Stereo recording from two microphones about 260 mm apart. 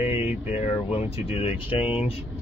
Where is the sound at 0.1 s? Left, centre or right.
Left.